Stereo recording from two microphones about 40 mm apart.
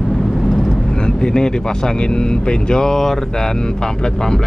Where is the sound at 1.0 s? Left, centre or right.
Centre.